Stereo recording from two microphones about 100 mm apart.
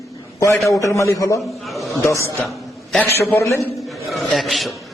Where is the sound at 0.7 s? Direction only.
35° left (ahead or behind).